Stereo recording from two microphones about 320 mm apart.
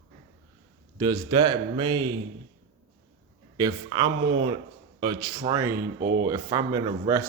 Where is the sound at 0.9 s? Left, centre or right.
Centre.